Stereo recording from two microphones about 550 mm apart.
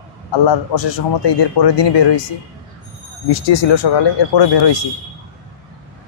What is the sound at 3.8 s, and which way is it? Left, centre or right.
Speech, left.